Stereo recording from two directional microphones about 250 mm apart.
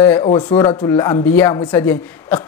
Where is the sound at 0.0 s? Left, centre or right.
Centre.